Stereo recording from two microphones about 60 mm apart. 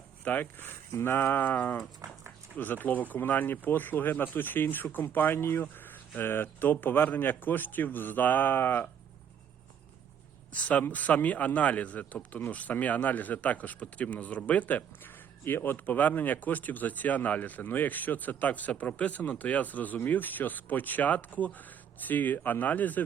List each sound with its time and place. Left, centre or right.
0.3 s speech: left
10.5 s speech: left